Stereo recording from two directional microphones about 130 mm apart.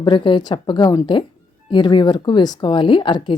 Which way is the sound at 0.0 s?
40° left (ahead or behind).